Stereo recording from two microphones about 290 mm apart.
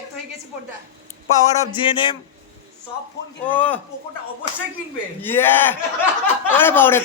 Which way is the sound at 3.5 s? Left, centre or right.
Centre.